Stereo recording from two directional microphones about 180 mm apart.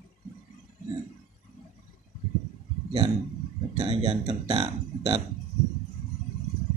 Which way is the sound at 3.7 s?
30° right (ahead or behind).